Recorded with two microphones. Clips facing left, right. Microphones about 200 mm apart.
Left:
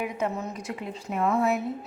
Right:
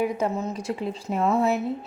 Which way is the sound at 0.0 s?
30° right (ahead or behind).